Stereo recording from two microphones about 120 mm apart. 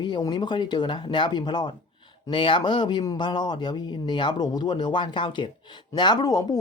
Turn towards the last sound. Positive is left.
turn(degrees=30)  # may be behind; listen again after turning